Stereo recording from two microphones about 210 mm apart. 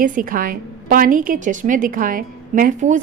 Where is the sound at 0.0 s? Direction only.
40° right (ahead or behind).